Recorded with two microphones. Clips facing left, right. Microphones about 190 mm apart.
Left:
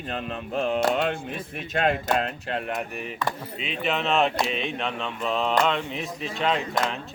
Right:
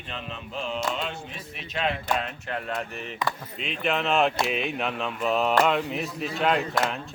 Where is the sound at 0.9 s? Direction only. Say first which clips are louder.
Left 7 dB; 55° left (ahead or behind).